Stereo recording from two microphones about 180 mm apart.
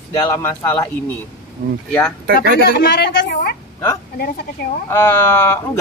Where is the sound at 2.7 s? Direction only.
65° left (ahead or behind).